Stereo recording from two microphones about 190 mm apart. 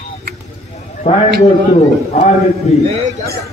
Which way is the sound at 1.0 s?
30° left (ahead or behind).